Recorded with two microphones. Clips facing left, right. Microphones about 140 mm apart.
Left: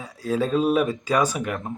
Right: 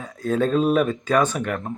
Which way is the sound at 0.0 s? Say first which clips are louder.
Right 2 dB; 5° left (ahead or behind).